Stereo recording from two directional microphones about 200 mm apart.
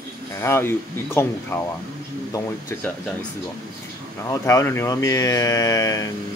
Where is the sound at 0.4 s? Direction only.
10° left (ahead or behind).